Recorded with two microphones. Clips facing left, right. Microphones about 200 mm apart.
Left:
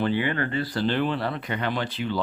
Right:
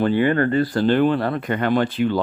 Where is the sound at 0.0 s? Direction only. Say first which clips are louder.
Right 7 dB; 50° right (ahead or behind).